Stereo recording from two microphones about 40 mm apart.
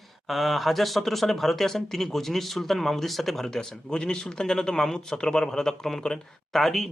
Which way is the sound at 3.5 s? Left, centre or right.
Centre.